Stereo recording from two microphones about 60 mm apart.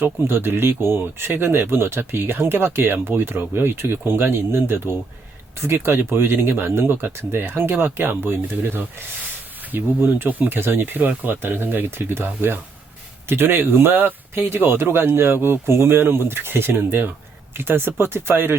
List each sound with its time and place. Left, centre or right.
0.0 s speech: right